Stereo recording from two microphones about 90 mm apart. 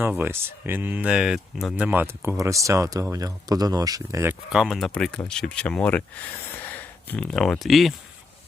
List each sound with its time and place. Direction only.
0.0 s speech: 20° right (ahead or behind); by 1.7 s 5° right (ahead or behind)
1.7 s speech: 15° right (ahead or behind)
2.4 s speech: 35° right (ahead or behind)
4.4 s speech: 5° right (ahead or behind)
4.9 s speech: 10° left (ahead or behind)
7.2 s speech: 5° left (ahead or behind)